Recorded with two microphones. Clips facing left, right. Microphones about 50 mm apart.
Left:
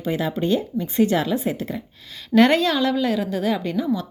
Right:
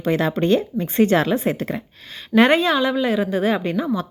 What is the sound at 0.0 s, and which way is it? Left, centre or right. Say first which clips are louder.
Speech: right 4 dB; right.